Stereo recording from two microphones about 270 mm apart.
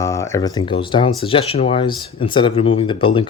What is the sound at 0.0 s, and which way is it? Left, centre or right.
Speech, centre.